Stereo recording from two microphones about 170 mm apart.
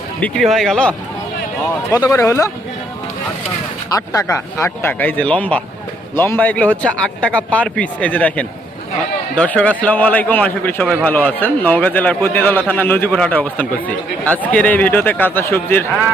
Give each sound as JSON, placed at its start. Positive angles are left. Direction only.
{"t": 0.2, "sound": "speech", "side_deg": 5}
{"t": 2.0, "sound": "a man's voice", "side_deg": 20}
{"t": 3.9, "sound": "a man's voice", "side_deg": 20}